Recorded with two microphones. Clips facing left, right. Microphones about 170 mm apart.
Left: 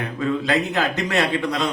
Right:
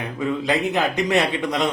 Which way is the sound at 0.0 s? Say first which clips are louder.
Left 1 dB; 15° right (ahead or behind).